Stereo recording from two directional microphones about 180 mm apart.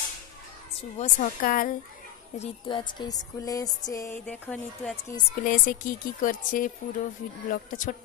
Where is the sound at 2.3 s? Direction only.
30° left (ahead or behind).